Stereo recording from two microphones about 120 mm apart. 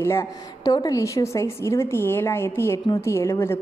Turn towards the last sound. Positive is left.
turn(degrees=20)  # may be behind; listen again after turning